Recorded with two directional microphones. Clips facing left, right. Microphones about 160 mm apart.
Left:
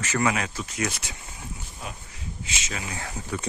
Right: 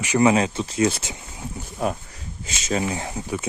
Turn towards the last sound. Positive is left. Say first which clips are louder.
# right 5 dB
turn(degrees=-20)  # may be behind; listen again after turning